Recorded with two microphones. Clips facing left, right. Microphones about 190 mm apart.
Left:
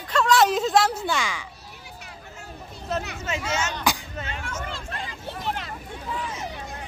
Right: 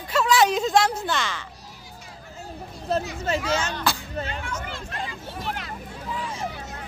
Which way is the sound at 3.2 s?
35° right (ahead or behind).